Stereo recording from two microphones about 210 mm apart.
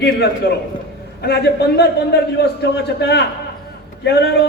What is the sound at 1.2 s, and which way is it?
A man's voice, 50° left (ahead or behind).